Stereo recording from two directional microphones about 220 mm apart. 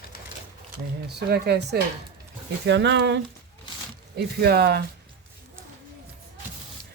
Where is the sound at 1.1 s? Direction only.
45° right (ahead or behind).